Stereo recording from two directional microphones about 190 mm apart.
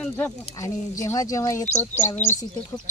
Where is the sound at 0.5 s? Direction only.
15° left (ahead or behind).